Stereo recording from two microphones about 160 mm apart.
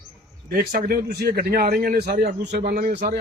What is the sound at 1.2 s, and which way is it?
A man's voice, 75° right (ahead or behind).